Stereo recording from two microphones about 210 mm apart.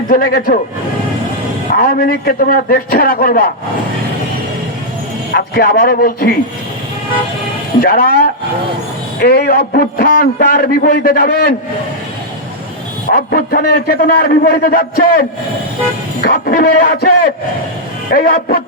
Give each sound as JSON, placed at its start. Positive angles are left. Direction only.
{"t": 0.1, "sound": "a man's voice", "side_deg": 45}
{"t": 1.7, "sound": "a man's voice", "side_deg": 45}
{"t": 5.3, "sound": "a man's voice", "side_deg": 45}
{"t": 7.8, "sound": "a man's voice", "side_deg": 45}
{"t": 13.1, "sound": "a man's voice", "side_deg": 45}